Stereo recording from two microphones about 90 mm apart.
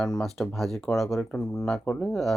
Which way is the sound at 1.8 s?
15° left (ahead or behind).